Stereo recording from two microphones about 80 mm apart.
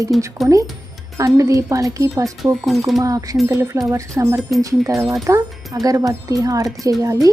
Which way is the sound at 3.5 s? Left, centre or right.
Right.